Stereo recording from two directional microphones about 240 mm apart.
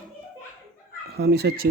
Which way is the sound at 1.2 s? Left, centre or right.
Right.